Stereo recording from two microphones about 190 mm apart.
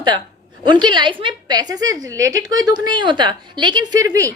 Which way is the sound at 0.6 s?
25° right (ahead or behind).